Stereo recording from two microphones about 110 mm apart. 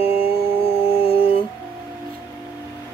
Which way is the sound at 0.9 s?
60° left (ahead or behind).